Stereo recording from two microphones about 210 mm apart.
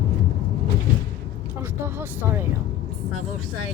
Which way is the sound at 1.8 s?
10° right (ahead or behind).